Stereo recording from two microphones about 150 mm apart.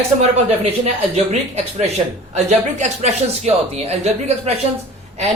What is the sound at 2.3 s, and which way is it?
Speech, 50° right (ahead or behind).